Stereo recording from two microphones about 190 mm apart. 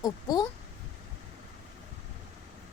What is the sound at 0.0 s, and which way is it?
Speech, 20° left (ahead or behind).